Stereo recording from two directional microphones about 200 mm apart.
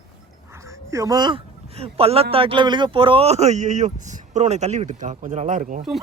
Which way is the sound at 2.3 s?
25° right (ahead or behind).